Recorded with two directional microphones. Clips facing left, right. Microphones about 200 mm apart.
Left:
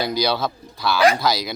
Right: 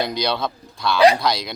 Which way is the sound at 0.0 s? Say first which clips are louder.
Left 1 dB; 5° left (ahead or behind).